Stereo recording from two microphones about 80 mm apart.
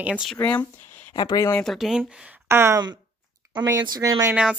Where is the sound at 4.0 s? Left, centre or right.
Right.